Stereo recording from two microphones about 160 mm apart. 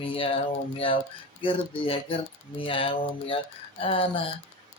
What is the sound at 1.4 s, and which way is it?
Mantra, 35° left (ahead or behind).